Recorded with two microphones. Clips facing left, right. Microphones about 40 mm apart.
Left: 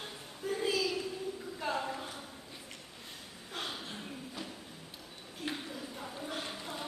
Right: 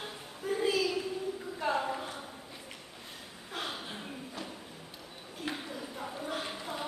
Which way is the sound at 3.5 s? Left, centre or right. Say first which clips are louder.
Right 2 dB; centre.